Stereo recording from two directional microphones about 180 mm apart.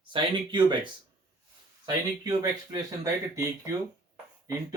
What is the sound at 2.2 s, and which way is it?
Speech, 20° right (ahead or behind).